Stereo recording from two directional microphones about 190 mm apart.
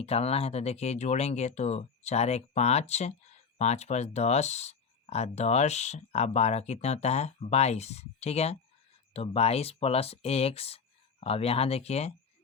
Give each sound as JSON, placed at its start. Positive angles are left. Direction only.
{"t": 0.0, "sound": "speech", "side_deg": 30}